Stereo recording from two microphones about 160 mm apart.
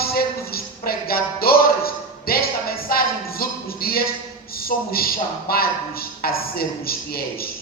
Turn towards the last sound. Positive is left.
turn(degrees=70)  # may be behind; listen again after turning